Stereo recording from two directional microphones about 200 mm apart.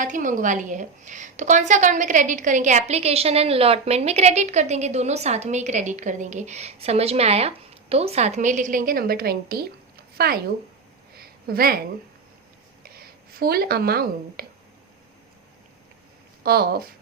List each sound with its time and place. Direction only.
0.0 s a woman's voice: 40° right (ahead or behind)
11.1 s a sound: 50° right (ahead or behind)
12.8 s speech: 50° right (ahead or behind)
16.4 s speech: 50° right (ahead or behind)